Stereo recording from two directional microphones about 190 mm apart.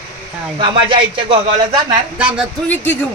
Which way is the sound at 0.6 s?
25° right (ahead or behind).